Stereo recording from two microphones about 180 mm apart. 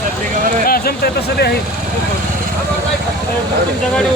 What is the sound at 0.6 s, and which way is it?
Speech, 55° left (ahead or behind).